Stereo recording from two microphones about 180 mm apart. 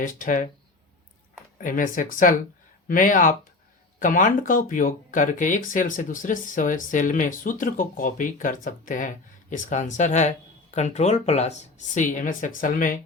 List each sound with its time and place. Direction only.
0.0 s speech: 45° left (ahead or behind)
1.5 s speech: 50° left (ahead or behind)